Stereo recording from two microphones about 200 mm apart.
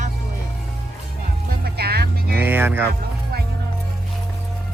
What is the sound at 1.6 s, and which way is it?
Music, 55° right (ahead or behind).